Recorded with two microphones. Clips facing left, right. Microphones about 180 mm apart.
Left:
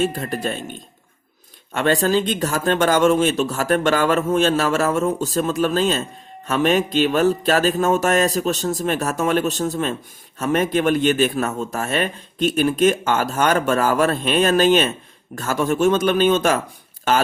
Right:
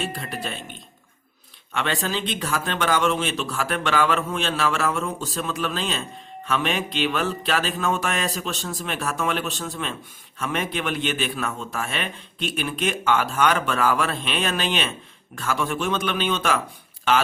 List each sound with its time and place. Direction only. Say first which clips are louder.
0.0 s speech: left 8 dB; 45° left (ahead or behind)